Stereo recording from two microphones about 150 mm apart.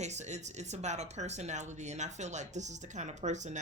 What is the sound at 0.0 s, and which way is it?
Speech, 50° right (ahead or behind).